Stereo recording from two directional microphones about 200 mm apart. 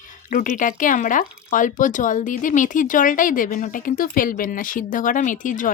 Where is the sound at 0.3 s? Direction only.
40° left (ahead or behind).